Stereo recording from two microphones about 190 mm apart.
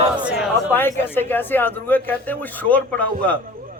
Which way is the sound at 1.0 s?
10° left (ahead or behind).